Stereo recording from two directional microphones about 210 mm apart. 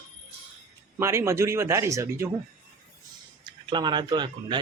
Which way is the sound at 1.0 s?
15° right (ahead or behind).